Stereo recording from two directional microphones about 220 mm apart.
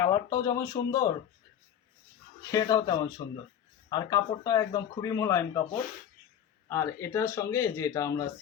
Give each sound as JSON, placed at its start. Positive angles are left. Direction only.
{"t": 0.0, "sound": "speech", "side_deg": 15}
{"t": 2.5, "sound": "speech", "side_deg": 15}
{"t": 6.7, "sound": "speech", "side_deg": 10}